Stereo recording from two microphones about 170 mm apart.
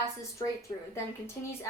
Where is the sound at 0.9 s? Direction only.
15° left (ahead or behind).